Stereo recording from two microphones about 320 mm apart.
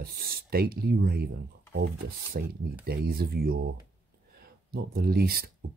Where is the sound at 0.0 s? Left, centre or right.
Right.